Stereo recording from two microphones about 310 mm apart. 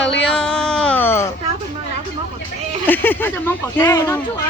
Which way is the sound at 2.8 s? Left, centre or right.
Centre.